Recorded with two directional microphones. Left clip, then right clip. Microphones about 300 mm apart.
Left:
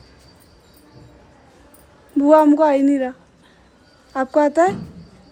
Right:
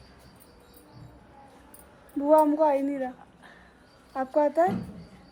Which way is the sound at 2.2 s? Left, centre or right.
Left.